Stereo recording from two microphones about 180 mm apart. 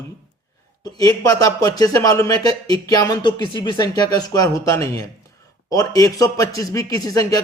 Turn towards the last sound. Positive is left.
turn(degrees=20)  # may be behind; listen again after turning